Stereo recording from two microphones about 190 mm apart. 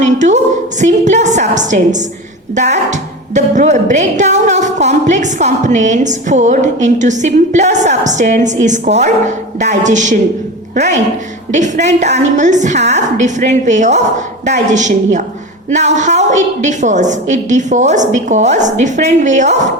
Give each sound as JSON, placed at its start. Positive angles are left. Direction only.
{"t": 0.0, "sound": "a woman's voice", "side_deg": -40}
{"t": 11.5, "sound": "a woman's voice", "side_deg": -40}